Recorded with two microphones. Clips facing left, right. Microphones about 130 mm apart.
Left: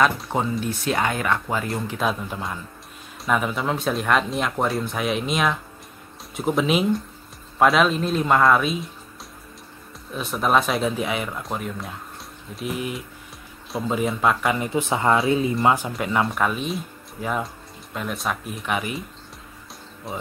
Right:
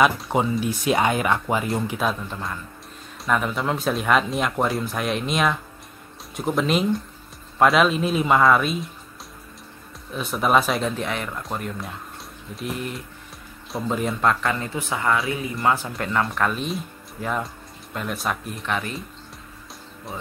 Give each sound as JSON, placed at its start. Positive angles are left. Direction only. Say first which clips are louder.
{"t": 0.0, "sound": "speech", "louder": "right 1 dB", "side_deg": -10}
{"t": 2.0, "sound": "speech", "louder": "left 2 dB", "side_deg": 0}
{"t": 3.3, "sound": "speech", "louder": "even", "side_deg": 5}
{"t": 10.1, "sound": "speech", "louder": "right 1 dB", "side_deg": 0}
{"t": 20.1, "sound": "speech", "louder": "left 3 dB", "side_deg": 0}